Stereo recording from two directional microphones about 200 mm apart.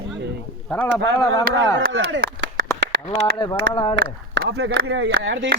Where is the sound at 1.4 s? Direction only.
70° right (ahead or behind).